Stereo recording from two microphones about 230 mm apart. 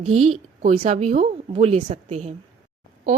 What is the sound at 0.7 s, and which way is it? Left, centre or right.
Speech, right.